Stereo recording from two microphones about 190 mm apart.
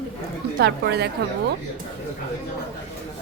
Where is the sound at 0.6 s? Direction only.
60° right (ahead or behind).